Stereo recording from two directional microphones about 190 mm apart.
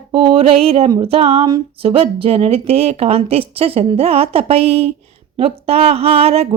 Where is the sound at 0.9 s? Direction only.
25° right (ahead or behind).